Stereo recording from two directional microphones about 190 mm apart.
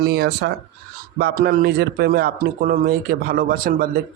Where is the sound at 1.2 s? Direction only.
50° right (ahead or behind).